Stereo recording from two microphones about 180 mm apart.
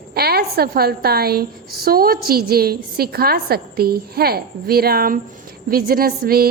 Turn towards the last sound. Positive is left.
turn(degrees=-55)  # may be behind; listen again after turning